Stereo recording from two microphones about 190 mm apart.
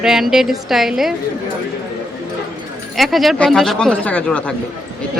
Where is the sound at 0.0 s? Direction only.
Centre (ahead or behind).